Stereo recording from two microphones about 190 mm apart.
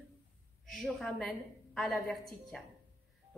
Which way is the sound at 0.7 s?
Centre (ahead or behind).